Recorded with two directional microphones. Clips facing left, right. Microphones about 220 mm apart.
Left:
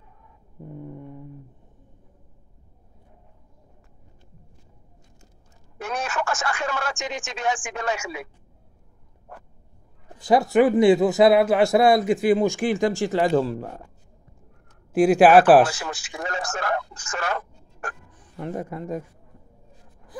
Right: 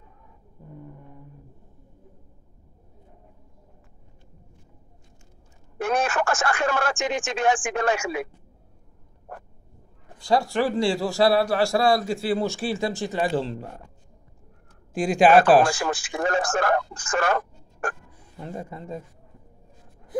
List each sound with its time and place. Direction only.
5.8 s speech: 55° right (ahead or behind)
10.1 s a man's voice: 20° left (ahead or behind)
15.0 s speech: 5° left (ahead or behind)
15.7 s speech: 55° right (ahead or behind)